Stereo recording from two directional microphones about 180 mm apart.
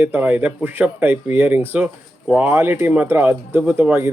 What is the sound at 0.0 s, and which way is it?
Speech, 10° right (ahead or behind).